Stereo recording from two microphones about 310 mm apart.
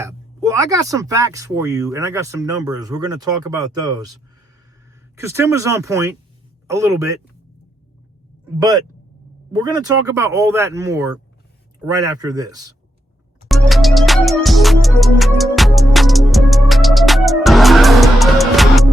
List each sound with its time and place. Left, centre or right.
0.0 s speech: centre
5.1 s speech: centre
8.5 s speech: centre
13.5 s music: centre